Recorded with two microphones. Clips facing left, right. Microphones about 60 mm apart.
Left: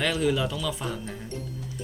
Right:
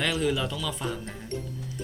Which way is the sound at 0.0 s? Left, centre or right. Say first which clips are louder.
Left 2 dB; centre.